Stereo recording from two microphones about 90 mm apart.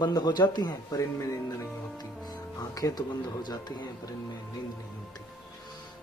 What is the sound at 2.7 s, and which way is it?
Speech, 45° left (ahead or behind).